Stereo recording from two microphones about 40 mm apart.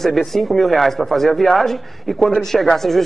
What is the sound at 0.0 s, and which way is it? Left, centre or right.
A man's voice, centre.